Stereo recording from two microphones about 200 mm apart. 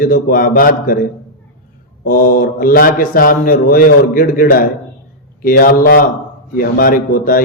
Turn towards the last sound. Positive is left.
turn(degrees=45)  # may be behind; listen again after turning